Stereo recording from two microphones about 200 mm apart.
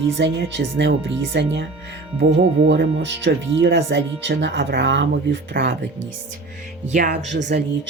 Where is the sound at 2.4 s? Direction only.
70° right (ahead or behind).